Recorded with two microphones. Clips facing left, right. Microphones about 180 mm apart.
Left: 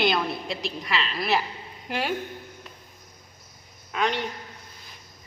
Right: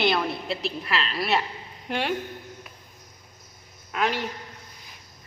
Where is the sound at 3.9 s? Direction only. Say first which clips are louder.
Even; 5° right (ahead or behind).